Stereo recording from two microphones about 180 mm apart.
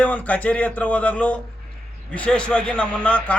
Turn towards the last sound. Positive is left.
turn(degrees=5)  # may be behind; listen again after turning